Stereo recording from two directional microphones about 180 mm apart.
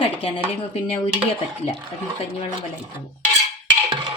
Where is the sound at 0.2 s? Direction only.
30° left (ahead or behind).